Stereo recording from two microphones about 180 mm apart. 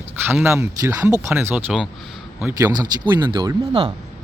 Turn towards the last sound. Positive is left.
turn(degrees=-25)  # may be behind; listen again after turning